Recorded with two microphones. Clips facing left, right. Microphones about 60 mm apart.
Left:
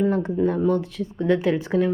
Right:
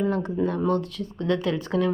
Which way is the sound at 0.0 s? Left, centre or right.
Left.